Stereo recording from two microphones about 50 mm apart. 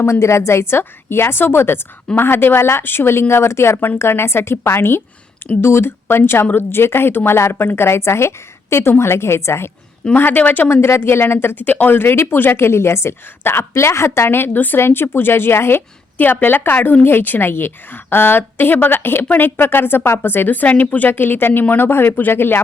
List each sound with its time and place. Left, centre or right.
0.0 s a woman's voice: left
10.2 s a woman's voice: left
10.7 s a woman's voice: left
11.6 s a woman's voice: left
14.8 s a woman's voice: left
16.1 s a woman's voice: left
21.1 s a woman's voice: left